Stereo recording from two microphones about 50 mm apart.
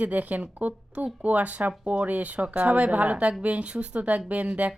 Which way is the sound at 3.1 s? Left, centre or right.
Centre.